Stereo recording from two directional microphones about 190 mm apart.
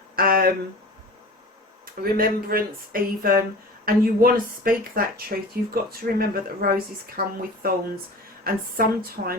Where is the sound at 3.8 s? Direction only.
50° right (ahead or behind).